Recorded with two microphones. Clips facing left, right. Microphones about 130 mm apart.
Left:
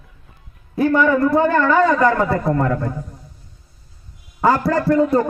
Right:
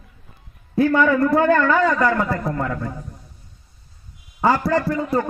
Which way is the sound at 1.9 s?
25° left (ahead or behind).